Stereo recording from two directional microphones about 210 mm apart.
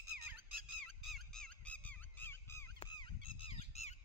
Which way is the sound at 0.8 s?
Centre (ahead or behind).